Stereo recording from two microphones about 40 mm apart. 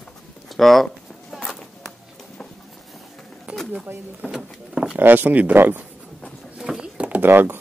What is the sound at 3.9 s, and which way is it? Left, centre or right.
Speech, right.